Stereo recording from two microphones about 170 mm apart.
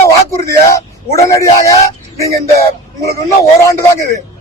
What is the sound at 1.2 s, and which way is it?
Speech, 20° left (ahead or behind).